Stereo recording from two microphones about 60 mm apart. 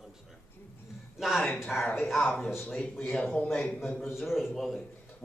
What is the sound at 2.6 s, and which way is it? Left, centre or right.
Speech, centre.